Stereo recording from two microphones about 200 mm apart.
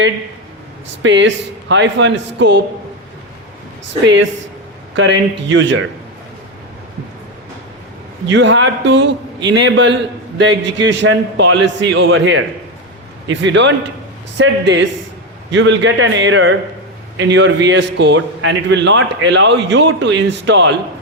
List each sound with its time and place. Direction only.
1.0 s a man's voice: 65° right (ahead or behind)
4.0 s a man's voice: 65° right (ahead or behind)
8.3 s a man's voice: 65° right (ahead or behind)